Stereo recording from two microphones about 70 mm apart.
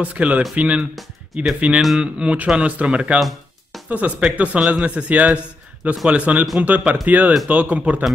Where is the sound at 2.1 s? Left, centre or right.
Centre.